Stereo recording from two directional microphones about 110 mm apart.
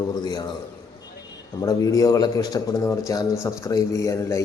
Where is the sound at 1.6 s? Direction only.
35° left (ahead or behind).